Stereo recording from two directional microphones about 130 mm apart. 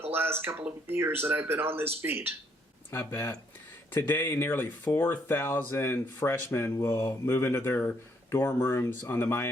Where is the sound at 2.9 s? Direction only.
20° left (ahead or behind).